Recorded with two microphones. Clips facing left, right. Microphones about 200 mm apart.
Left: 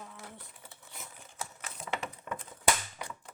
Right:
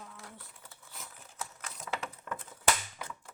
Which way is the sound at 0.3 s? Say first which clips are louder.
Left 2 dB; 15° left (ahead or behind).